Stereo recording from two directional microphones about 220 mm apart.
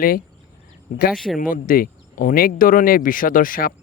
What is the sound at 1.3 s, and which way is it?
Speech, 40° left (ahead or behind).